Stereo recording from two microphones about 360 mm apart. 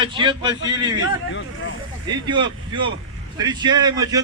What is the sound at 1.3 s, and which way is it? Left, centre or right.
Speech, left.